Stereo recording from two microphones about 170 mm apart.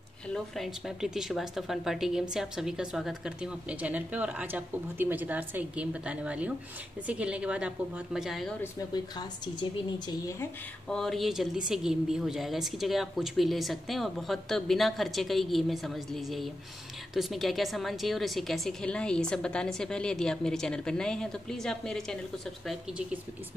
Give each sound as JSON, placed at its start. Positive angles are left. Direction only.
{"t": 0.3, "sound": "a woman's voice", "side_deg": 0}
{"t": 8.9, "sound": "speech", "side_deg": 25}
{"t": 10.9, "sound": "speech", "side_deg": 0}